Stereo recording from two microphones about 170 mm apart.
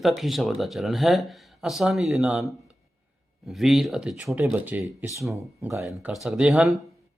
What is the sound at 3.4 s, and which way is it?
Speech, centre (ahead or behind).